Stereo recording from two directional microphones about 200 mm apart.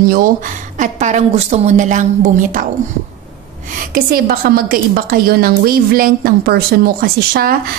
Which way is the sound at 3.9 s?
45° right (ahead or behind).